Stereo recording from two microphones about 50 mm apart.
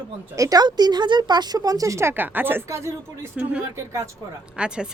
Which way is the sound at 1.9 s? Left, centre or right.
Right.